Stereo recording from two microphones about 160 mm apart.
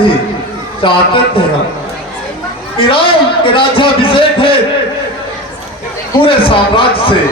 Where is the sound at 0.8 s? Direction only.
30° left (ahead or behind).